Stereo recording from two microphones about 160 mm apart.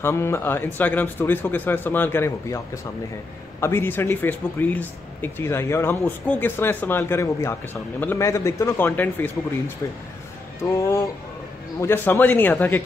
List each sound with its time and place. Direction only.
0.0 s speech: 15° left (ahead or behind)
10.6 s speech: 20° left (ahead or behind)